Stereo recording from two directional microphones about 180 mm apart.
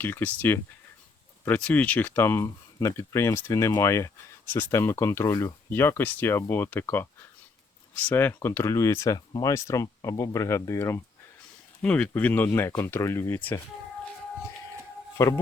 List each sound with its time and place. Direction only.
0.0 s speech: 10° left (ahead or behind)
15.2 s speech: 15° left (ahead or behind)